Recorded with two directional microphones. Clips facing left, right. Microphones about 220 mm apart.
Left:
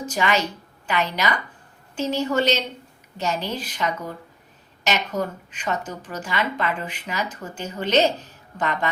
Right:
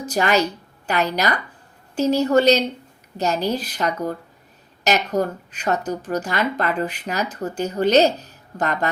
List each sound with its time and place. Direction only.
0.0 s a woman's voice: 40° right (ahead or behind)